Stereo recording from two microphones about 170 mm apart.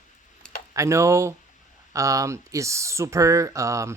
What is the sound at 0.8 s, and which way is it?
Speech, 15° right (ahead or behind).